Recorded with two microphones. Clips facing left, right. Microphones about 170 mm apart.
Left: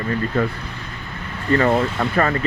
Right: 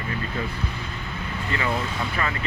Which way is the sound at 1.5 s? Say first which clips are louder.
Left 10 dB; 45° left (ahead or behind).